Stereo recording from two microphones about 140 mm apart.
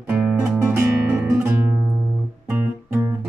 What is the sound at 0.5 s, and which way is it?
Guitar, 15° right (ahead or behind).